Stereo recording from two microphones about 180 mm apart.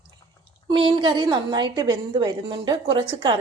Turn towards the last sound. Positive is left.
turn(degrees=-25)  # may be behind; listen again after turning